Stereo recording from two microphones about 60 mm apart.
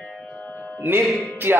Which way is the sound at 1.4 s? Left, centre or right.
Right.